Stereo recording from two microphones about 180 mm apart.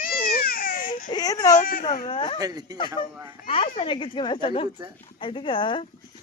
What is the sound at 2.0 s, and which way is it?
Speech, 25° left (ahead or behind).